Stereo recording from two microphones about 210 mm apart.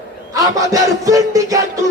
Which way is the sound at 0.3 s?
15° right (ahead or behind).